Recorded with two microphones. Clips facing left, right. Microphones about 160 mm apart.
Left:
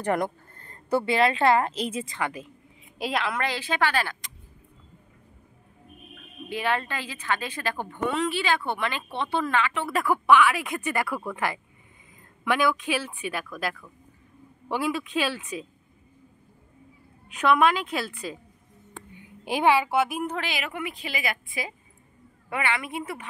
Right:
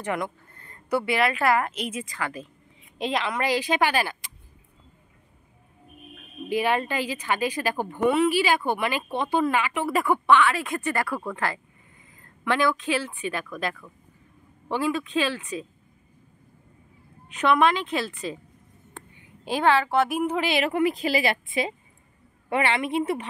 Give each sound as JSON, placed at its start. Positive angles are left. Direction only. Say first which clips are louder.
{"t": 0.0, "sound": "a woman's voice", "louder": "left 3 dB", "side_deg": 40}
{"t": 3.0, "sound": "a woman's voice", "louder": "right 1 dB", "side_deg": 5}
{"t": 3.3, "sound": "speech", "louder": "right 4 dB", "side_deg": -10}
{"t": 6.5, "sound": "speech", "louder": "right 4 dB", "side_deg": -15}
{"t": 10.0, "sound": "speech", "louder": "left 1 dB", "side_deg": 5}
{"t": 17.3, "sound": "a woman's voice", "louder": "even", "side_deg": 0}
{"t": 19.4, "sound": "speech", "louder": "even", "side_deg": 15}
{"t": 20.1, "sound": "a woman's voice", "louder": "right 5 dB", "side_deg": -5}
{"t": 20.6, "sound": "a woman's voice", "louder": "right 10 dB", "side_deg": -35}